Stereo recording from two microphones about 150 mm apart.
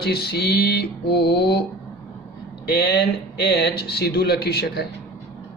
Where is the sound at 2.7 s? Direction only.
90° left.